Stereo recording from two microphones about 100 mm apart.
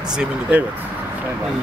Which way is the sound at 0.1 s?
10° right (ahead or behind).